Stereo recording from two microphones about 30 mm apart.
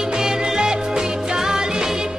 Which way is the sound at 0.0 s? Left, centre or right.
Centre.